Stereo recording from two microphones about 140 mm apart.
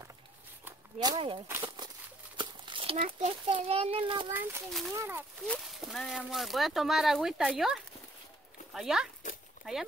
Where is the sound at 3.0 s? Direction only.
45° right (ahead or behind).